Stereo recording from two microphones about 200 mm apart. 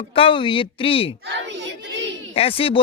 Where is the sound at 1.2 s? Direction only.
60° right (ahead or behind).